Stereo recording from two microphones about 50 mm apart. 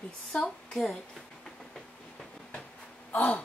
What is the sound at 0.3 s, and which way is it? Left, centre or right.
Speech, centre.